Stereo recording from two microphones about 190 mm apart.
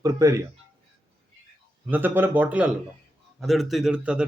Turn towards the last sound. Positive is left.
turn(degrees=-5)  # may be behind; listen again after turning